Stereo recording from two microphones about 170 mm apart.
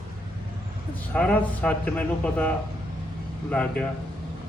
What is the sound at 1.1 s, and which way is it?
A man's voice, 5° left (ahead or behind).